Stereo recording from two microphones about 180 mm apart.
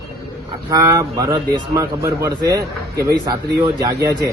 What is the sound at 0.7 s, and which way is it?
A man's voice, 20° right (ahead or behind).